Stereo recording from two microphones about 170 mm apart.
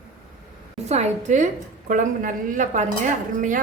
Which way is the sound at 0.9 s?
40° right (ahead or behind).